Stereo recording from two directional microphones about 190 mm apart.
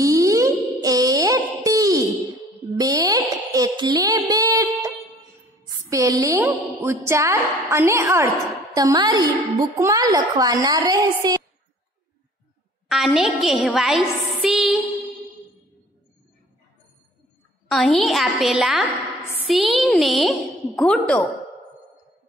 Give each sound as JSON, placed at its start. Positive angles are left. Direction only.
{"t": 0.0, "sound": "music", "side_deg": -20}
{"t": 2.8, "sound": "a sound", "side_deg": -20}
{"t": 7.1, "sound": "a woman's voice", "side_deg": -15}
{"t": 12.8, "sound": "a woman's voice", "side_deg": 0}
{"t": 14.4, "sound": "music", "side_deg": 0}
{"t": 17.6, "sound": "a woman's voice", "side_deg": 0}